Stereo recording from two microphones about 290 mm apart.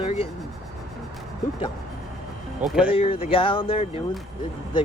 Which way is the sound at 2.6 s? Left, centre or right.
Centre.